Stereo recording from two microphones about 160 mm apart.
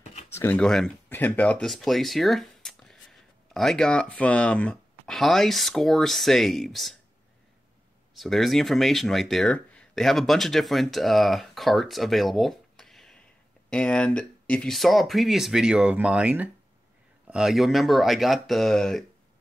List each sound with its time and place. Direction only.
0.3 s speech: 15° left (ahead or behind)
0.6 s speech: 5° left (ahead or behind)
8.1 s speech: centre (ahead or behind)